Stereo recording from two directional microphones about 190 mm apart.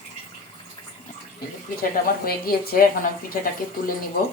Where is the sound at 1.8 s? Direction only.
50° left (ahead or behind).